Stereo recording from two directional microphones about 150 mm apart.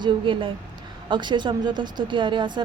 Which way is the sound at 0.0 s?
35° right (ahead or behind).